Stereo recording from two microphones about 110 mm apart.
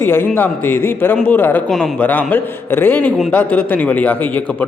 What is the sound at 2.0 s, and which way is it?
A man's voice, 15° left (ahead or behind).